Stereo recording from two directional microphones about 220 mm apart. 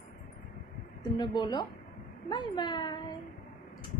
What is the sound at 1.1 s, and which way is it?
Speech, 20° left (ahead or behind).